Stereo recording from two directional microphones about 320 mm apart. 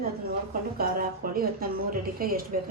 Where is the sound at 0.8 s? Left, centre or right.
Right.